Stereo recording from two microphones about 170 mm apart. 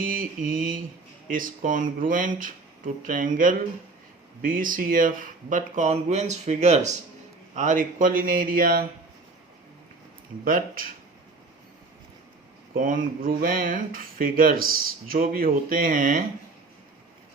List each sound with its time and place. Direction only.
0.0 s speech: 55° right (ahead or behind)
10.4 s speech: 55° right (ahead or behind)
12.7 s speech: 55° right (ahead or behind)